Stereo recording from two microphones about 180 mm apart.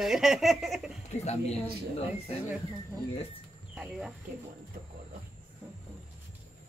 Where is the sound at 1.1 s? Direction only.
40° left (ahead or behind).